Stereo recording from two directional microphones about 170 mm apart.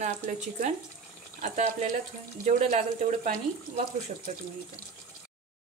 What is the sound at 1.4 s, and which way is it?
Speech, 45° right (ahead or behind).